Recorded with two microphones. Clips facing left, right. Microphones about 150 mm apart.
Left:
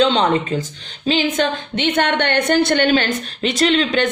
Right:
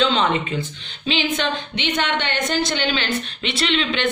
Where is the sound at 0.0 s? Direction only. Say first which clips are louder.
Left 4 dB; 35° left (ahead or behind).